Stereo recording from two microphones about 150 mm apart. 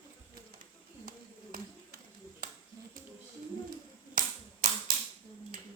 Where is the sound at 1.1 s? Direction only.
70° right (ahead or behind).